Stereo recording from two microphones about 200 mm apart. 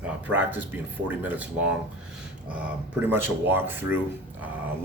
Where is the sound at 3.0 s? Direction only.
10° right (ahead or behind).